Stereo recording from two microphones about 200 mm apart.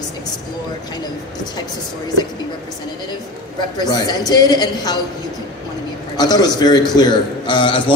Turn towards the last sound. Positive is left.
turn(degrees=25)  # may be behind; listen again after turning